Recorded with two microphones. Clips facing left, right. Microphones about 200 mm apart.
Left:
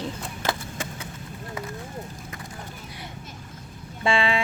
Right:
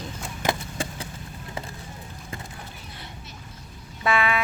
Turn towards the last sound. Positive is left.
turn(degrees=30)  # may be behind; listen again after turning